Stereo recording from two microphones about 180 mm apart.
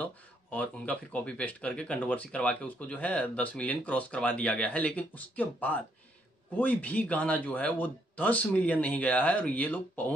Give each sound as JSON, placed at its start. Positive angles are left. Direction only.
{"t": 0.0, "sound": "speech", "side_deg": 10}